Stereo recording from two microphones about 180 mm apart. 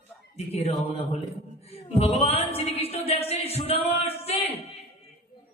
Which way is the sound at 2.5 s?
35° left (ahead or behind).